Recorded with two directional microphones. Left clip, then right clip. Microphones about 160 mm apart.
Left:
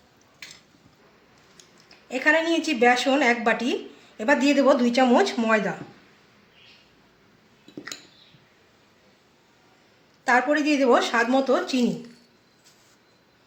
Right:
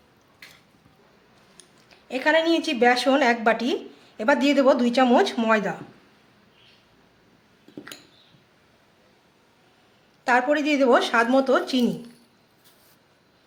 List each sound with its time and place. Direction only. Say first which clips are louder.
2.0 s a woman's voice: right 1 dB; 5° right (ahead or behind)
10.2 s a woman's voice: even; 10° right (ahead or behind)